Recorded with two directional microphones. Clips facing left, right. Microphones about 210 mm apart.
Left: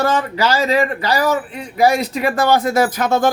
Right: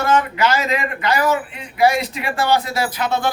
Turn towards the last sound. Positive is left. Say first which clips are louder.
# left 5 dB
turn(degrees=45)  # may be behind; listen again after turning